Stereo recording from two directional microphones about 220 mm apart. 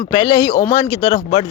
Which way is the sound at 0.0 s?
15° left (ahead or behind).